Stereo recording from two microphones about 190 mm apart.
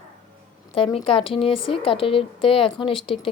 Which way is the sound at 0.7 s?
30° left (ahead or behind).